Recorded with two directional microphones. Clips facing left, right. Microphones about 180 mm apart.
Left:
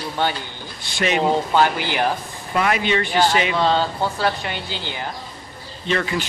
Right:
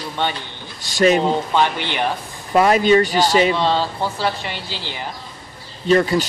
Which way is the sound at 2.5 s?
35° right (ahead or behind).